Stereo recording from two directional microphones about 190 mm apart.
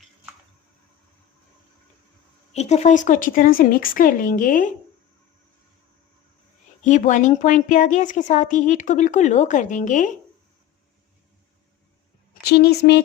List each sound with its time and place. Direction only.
2.5 s speech: 35° left (ahead or behind)
6.8 s speech: 40° left (ahead or behind)
12.3 s a woman's voice: 60° left (ahead or behind)